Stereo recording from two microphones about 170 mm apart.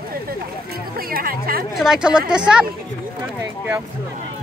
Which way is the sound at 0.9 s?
60° right (ahead or behind).